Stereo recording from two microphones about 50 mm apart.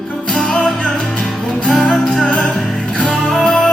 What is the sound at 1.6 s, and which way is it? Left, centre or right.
Music, centre.